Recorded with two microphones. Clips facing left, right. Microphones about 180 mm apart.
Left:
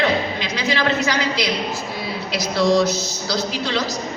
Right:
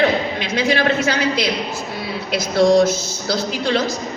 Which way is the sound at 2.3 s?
50° right (ahead or behind).